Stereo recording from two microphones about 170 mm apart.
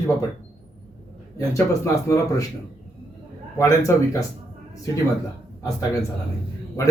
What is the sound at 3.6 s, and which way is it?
Speech, 20° left (ahead or behind).